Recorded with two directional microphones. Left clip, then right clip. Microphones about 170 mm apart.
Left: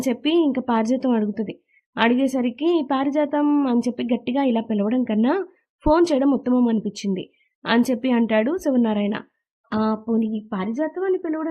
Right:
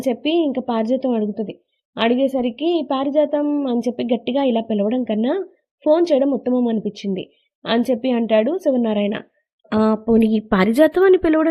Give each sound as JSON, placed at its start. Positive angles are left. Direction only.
{"t": 0.0, "sound": "speech", "side_deg": 5}
{"t": 9.6, "sound": "speech", "side_deg": -20}
{"t": 10.2, "sound": "a woman's voice", "side_deg": -40}